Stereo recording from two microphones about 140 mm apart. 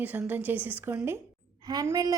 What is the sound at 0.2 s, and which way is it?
A woman's voice, 15° right (ahead or behind).